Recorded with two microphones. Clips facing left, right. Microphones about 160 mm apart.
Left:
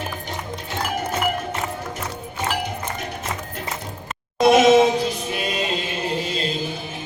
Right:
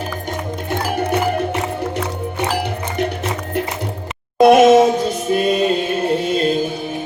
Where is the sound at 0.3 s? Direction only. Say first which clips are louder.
Right 7 dB; 60° right (ahead or behind).